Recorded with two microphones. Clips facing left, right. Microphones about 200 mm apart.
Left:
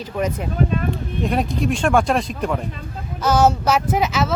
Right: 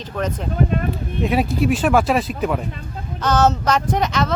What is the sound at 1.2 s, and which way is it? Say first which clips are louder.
Speech: right 3 dB; 5° right (ahead or behind).